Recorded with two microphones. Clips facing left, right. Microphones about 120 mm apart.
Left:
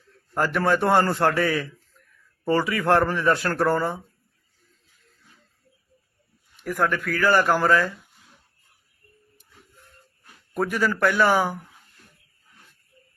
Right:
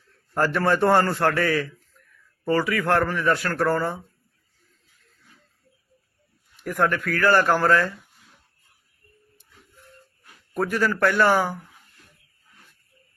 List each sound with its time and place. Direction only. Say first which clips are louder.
0.3 s speech: right 1 dB; 10° left (ahead or behind)
1.0 s speech: left 1 dB; 20° left (ahead or behind)
6.6 s speech: right 1 dB; centre (ahead or behind)
10.5 s speech: even; 10° left (ahead or behind)